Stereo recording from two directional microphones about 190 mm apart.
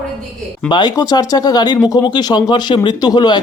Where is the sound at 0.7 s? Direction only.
20° left (ahead or behind).